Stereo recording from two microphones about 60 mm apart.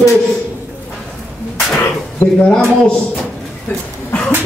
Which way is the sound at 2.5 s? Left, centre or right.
Centre.